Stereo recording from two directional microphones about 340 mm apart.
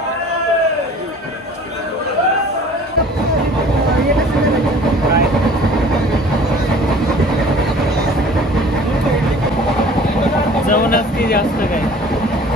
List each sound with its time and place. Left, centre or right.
10.7 s speech: left